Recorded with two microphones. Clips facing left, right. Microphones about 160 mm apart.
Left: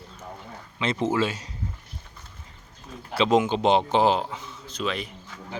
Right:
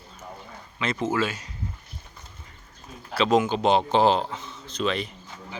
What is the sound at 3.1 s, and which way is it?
Speech, 20° left (ahead or behind).